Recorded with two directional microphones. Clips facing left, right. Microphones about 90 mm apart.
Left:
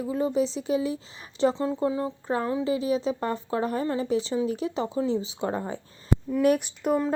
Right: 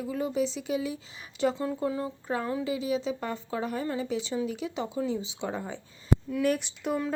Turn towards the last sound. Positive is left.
turn(degrees=50)  # may be behind; listen again after turning